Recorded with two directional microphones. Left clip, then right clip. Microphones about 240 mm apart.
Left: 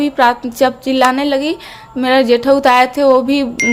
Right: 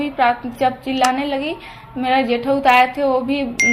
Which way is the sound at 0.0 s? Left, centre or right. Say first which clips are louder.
Left 5 dB; left.